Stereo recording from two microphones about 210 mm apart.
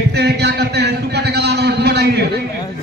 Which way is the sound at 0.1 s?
50° right (ahead or behind).